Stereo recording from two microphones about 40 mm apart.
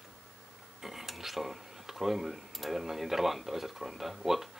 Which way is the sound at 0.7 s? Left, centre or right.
Centre.